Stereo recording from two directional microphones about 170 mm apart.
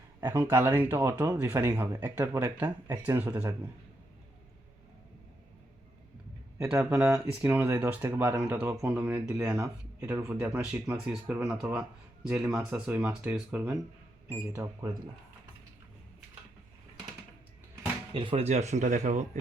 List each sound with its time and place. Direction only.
0.2 s speech: 15° right (ahead or behind)
6.6 s speech: 15° right (ahead or behind)
18.1 s speech: 30° right (ahead or behind); by 19.4 s 45° right (ahead or behind)